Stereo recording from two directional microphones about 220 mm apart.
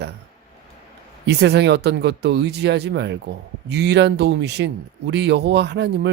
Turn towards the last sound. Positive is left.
turn(degrees=-50)  # may be behind; listen again after turning